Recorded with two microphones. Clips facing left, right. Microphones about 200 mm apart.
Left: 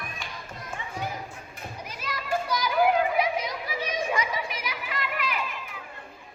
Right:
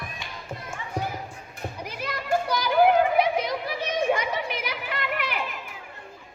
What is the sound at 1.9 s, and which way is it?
Children playing, 60° right (ahead or behind).